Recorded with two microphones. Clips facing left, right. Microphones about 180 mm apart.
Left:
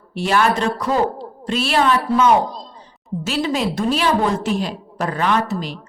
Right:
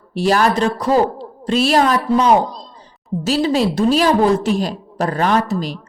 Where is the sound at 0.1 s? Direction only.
35° right (ahead or behind).